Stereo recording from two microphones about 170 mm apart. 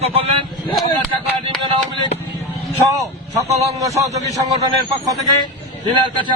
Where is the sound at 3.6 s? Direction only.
20° right (ahead or behind).